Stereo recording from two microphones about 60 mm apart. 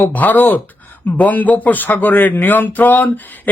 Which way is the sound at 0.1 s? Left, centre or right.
Left.